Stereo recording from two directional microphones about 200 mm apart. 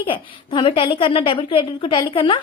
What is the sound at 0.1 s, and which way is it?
A woman's voice, 25° left (ahead or behind).